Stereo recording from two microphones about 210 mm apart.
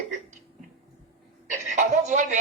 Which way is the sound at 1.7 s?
35° right (ahead or behind).